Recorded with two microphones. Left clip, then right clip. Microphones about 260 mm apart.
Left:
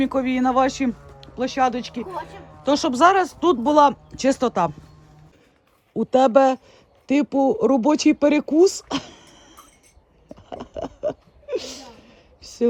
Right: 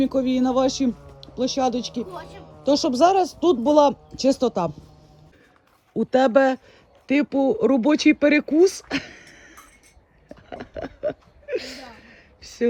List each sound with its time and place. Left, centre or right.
0.0 s speech: centre
5.9 s speech: centre
10.5 s a sound: centre